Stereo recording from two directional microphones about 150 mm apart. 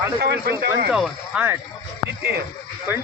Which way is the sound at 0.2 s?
90° right.